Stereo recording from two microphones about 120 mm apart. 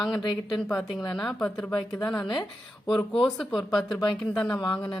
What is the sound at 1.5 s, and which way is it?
Speech, 30° left (ahead or behind).